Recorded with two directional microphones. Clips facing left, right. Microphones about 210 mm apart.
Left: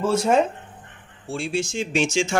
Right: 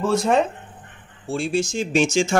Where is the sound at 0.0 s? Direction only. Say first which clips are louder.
Even; 5° left (ahead or behind).